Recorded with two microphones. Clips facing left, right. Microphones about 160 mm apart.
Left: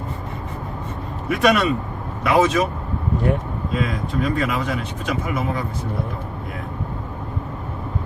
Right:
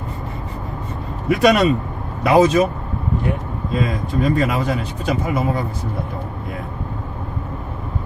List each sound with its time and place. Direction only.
1.3 s speech: 35° right (ahead or behind)
3.8 s speech: 35° right (ahead or behind)